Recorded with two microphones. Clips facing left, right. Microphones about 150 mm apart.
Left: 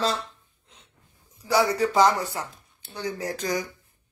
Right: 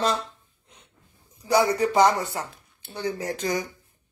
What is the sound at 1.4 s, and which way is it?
Speech, 20° right (ahead or behind).